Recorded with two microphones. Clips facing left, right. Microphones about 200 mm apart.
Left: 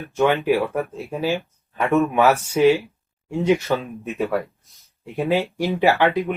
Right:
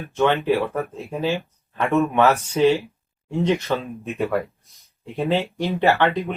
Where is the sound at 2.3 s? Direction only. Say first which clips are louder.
Left 2 dB; 10° left (ahead or behind).